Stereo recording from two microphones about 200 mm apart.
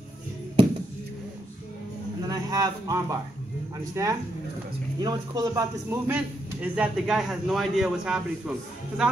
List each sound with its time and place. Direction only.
2.2 s a man's voice: 20° right (ahead or behind)